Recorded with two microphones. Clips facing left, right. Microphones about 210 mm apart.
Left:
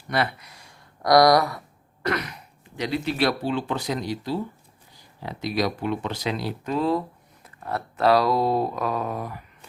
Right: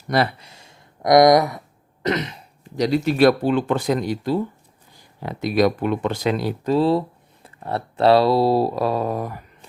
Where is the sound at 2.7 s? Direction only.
40° right (ahead or behind).